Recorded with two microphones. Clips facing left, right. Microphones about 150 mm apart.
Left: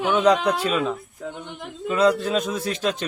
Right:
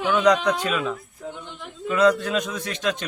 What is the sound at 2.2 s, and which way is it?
Speech, 30° left (ahead or behind).